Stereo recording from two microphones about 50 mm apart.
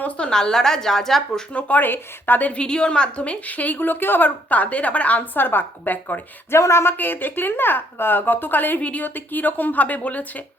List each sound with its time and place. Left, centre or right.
0.2 s a woman's voice: centre
1.5 s a woman's voice: left
2.5 s a woman's voice: left
6.5 s speech: left
6.9 s a woman's voice: left